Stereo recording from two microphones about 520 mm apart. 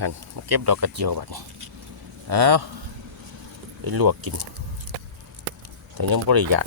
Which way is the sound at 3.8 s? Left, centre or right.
Right.